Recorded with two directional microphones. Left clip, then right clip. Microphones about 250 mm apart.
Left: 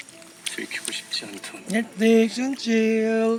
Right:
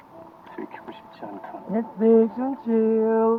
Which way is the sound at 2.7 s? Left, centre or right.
Right.